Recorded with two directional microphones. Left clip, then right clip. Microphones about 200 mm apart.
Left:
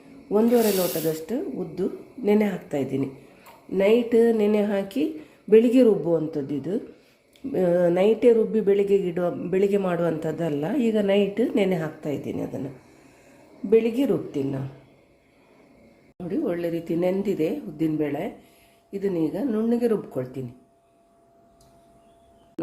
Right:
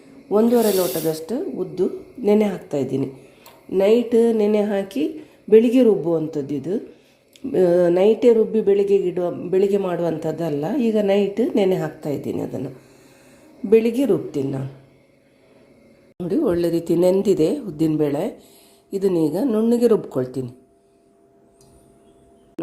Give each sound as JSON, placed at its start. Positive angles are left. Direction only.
{"t": 0.5, "sound": "speech", "side_deg": 10}
{"t": 1.3, "sound": "a woman's voice", "side_deg": -5}
{"t": 13.7, "sound": "a woman's voice", "side_deg": -20}
{"t": 16.1, "sound": "speech", "side_deg": -25}
{"t": 22.6, "sound": "a sound", "side_deg": 0}